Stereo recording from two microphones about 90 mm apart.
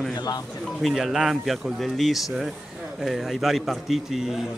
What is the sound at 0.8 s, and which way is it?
A man's voice, 5° right (ahead or behind).